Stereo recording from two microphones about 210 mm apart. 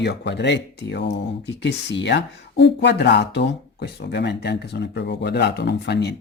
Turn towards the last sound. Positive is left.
turn(degrees=55)  # may be behind; listen again after turning